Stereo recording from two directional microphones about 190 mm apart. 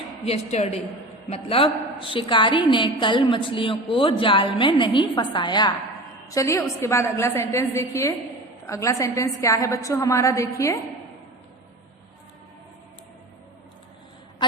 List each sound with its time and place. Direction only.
0.3 s a woman's voice: 35° left (ahead or behind); by 10.8 s 15° left (ahead or behind)